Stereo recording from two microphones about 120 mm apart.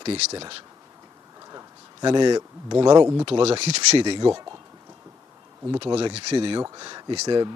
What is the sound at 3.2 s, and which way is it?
Speech, 55° right (ahead or behind).